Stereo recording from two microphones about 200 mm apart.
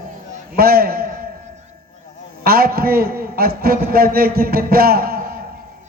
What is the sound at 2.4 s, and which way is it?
A man's voice, 50° right (ahead or behind).